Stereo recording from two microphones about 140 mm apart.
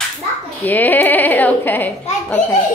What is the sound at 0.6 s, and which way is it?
A child's voice, 15° left (ahead or behind).